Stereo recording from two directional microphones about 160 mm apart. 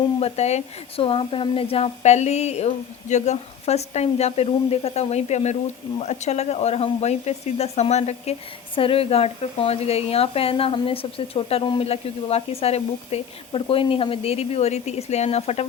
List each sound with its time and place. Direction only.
0.2 s speech: 40° left (ahead or behind)